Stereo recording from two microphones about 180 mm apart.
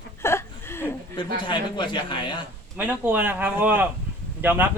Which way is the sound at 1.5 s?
25° left (ahead or behind).